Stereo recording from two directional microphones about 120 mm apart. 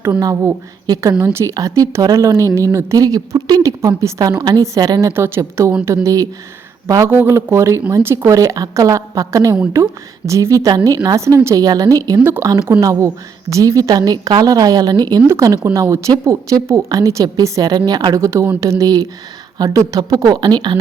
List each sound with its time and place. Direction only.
0.2 s a woman's voice: 30° right (ahead or behind)